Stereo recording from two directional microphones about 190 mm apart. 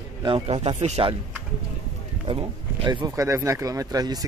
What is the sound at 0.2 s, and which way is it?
Speech, 30° right (ahead or behind).